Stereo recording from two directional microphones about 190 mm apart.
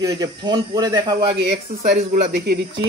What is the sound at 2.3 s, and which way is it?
Speech, 65° right (ahead or behind).